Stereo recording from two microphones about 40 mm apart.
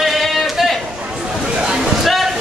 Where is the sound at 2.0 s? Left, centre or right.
Centre.